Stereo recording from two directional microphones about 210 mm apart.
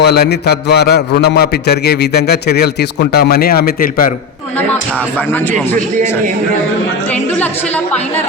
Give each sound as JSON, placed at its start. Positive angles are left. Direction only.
{"t": 0.0, "sound": "a man's voice", "side_deg": 50}